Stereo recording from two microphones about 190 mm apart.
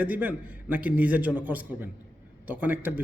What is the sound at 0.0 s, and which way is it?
A man's voice, 10° right (ahead or behind).